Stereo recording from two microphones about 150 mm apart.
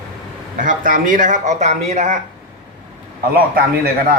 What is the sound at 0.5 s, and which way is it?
Speech, 60° right (ahead or behind).